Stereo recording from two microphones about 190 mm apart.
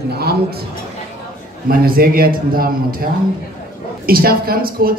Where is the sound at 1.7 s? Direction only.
50° right (ahead or behind).